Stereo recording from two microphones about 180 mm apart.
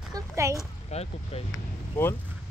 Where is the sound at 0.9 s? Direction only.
35° left (ahead or behind).